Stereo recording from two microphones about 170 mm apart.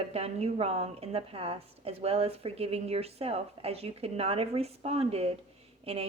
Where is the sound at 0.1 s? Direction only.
35° right (ahead or behind).